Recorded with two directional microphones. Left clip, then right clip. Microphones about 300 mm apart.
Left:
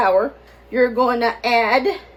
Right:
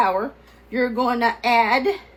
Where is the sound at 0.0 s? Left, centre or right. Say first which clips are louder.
Left 4 dB; right.